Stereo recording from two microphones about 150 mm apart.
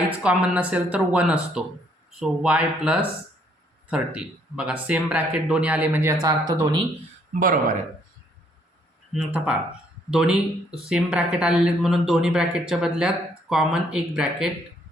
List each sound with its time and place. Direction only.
0.2 s speech: 5° right (ahead or behind); by 6.7 s 25° right (ahead or behind)
7.3 s speech: 65° right (ahead or behind)
9.1 s speech: 10° right (ahead or behind)